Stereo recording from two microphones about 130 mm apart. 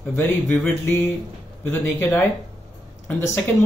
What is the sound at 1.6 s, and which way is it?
Speech, 10° left (ahead or behind).